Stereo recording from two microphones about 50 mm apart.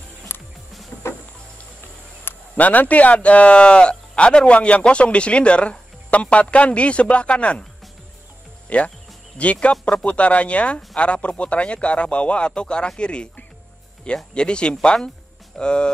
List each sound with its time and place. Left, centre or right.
0.3 s music: left
2.5 s speech: left
8.6 s speech: left